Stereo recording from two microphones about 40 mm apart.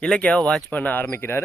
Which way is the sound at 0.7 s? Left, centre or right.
Left.